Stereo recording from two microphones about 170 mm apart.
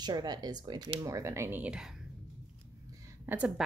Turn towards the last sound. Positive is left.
turn(degrees=-10)  # may be behind; listen again after turning